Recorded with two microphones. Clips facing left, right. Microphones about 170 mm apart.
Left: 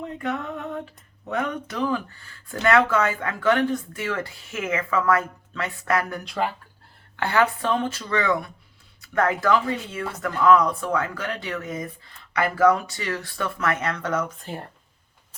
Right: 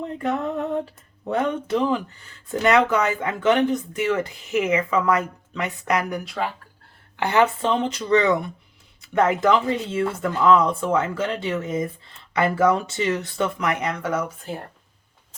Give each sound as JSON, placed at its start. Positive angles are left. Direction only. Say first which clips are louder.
{"t": 0.2, "sound": "a sound", "louder": "right 5 dB", "side_deg": -35}
{"t": 1.3, "sound": "speech", "louder": "right 5 dB", "side_deg": -30}
{"t": 6.2, "sound": "speech", "louder": "left 1 dB", "side_deg": 0}
{"t": 7.2, "sound": "speech", "louder": "right 3 dB", "side_deg": -20}